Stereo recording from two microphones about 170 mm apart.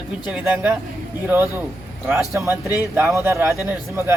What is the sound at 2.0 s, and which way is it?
A man's voice, 15° right (ahead or behind).